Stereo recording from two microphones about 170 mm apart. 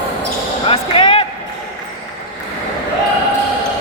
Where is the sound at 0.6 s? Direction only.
30° left (ahead or behind).